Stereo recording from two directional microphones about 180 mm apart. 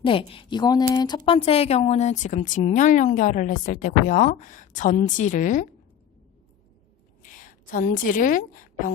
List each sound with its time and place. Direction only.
0.0 s a woman's voice: 30° left (ahead or behind); by 5.6 s 45° left (ahead or behind)
7.2 s a woman's voice: 45° left (ahead or behind)